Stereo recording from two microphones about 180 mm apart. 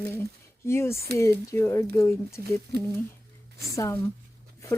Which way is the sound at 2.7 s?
65° right (ahead or behind).